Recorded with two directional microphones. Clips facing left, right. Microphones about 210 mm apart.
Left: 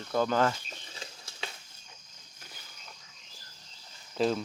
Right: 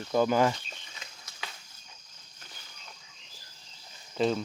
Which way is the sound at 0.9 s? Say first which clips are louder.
Left 5 dB; 30° left (ahead or behind).